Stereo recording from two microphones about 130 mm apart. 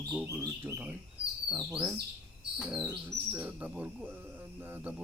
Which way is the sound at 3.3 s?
15° right (ahead or behind).